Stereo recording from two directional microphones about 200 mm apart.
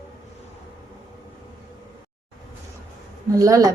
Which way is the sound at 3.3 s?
15° right (ahead or behind).